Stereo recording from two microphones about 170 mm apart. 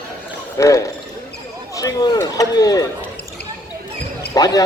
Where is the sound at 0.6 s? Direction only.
20° left (ahead or behind).